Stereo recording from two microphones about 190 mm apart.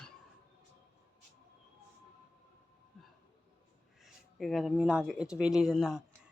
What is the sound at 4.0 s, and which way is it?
Speech, centre (ahead or behind).